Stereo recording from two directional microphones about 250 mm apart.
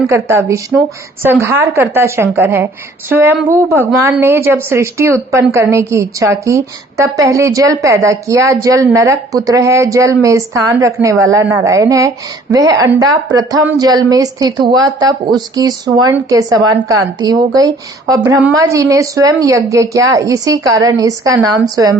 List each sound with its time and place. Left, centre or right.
0.1 s a woman's voice: centre